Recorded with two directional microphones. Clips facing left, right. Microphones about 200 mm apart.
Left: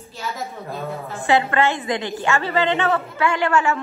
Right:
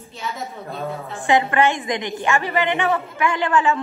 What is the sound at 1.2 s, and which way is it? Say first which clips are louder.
A woman's voice: right 1 dB; 15° right (ahead or behind).